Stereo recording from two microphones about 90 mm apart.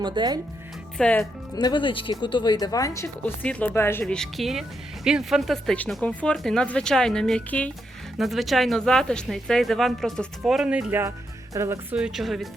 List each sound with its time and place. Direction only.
0.0 s speech: 55° right (ahead or behind)
0.9 s speech: 15° left (ahead or behind)
1.5 s speech: 55° left (ahead or behind); by 3.1 s 35° left (ahead or behind)
3.2 s speech: 15° left (ahead or behind)
3.8 s speech: 25° left (ahead or behind)
4.0 s speech: 5° left (ahead or behind)
6.0 s speech: 10° left (ahead or behind)
8.2 s speech: centre (ahead or behind)
11.5 s speech: 30° right (ahead or behind)
11.9 s speech: 5° right (ahead or behind)